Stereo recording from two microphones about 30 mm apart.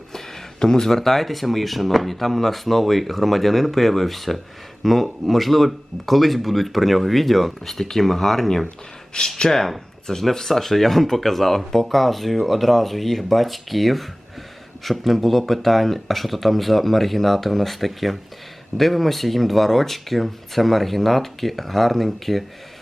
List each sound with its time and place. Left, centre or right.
0.1 s speech: centre
9.1 s speech: left
9.5 s speech: centre